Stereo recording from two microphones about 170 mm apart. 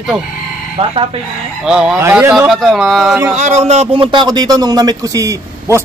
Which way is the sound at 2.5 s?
Centre (ahead or behind).